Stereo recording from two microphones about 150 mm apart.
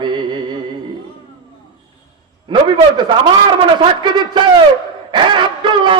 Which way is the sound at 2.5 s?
30° right (ahead or behind).